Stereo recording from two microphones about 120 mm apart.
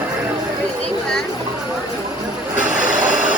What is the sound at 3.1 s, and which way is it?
Vehicle, 90° right.